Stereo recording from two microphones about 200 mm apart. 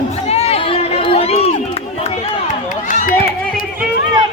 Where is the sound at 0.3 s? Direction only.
30° left (ahead or behind).